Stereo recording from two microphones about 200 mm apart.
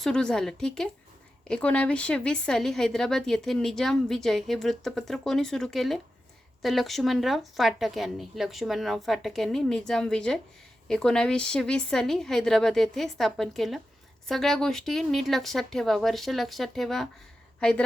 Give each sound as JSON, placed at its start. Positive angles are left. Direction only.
{"t": 0.0, "sound": "speech", "side_deg": 5}